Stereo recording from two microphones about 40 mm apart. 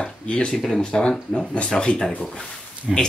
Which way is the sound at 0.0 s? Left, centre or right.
Left.